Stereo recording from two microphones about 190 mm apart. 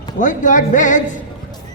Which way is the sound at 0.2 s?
40° left (ahead or behind).